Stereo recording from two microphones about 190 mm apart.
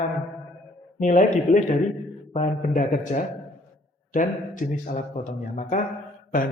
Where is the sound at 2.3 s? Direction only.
40° left (ahead or behind).